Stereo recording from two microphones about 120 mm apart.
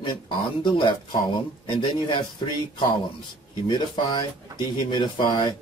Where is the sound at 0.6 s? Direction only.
40° left (ahead or behind).